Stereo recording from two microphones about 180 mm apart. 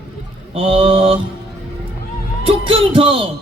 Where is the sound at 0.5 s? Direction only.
30° right (ahead or behind).